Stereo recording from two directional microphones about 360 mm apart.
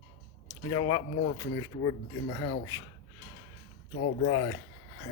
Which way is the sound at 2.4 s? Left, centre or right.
Left.